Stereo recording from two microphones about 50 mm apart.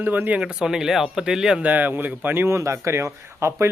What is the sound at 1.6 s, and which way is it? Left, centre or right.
Speech, right.